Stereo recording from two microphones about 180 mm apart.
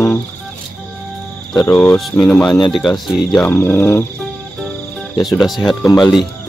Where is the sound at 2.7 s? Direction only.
Centre (ahead or behind).